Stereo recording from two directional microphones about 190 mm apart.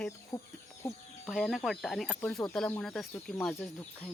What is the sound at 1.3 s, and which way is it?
Speech, centre (ahead or behind).